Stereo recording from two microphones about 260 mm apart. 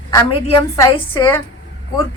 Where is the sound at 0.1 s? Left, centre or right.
Centre.